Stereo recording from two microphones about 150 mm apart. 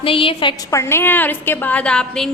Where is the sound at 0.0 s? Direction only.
35° left (ahead or behind).